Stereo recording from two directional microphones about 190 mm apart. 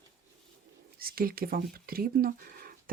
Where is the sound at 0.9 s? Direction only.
50° right (ahead or behind).